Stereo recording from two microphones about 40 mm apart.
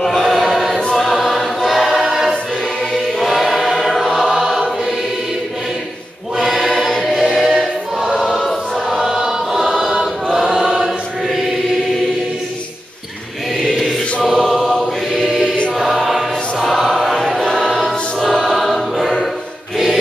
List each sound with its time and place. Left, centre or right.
0.0 s choir: centre
6.3 s choir: centre
8.8 s chant: centre
10.3 s choir: centre
13.7 s choir: centre
15.7 s choir: centre